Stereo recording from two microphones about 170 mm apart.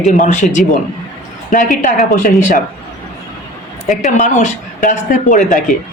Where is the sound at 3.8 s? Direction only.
45° left (ahead or behind).